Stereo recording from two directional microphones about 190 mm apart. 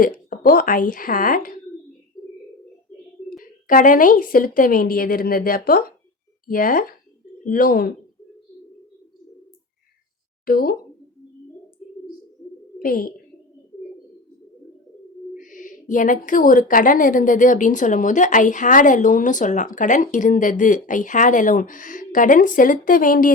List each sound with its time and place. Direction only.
0.0 s a woman's voice: 50° left (ahead or behind)
2.2 s bird: 20° left (ahead or behind)
3.7 s a woman's voice: 45° left (ahead or behind)
10.4 s a woman's voice: 50° left (ahead or behind)
12.8 s speech: 50° left (ahead or behind)
15.4 s a woman's voice: 45° left (ahead or behind)